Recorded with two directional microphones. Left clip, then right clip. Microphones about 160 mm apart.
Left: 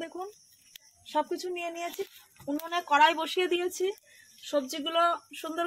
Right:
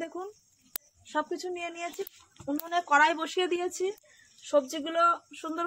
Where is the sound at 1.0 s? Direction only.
10° left (ahead or behind).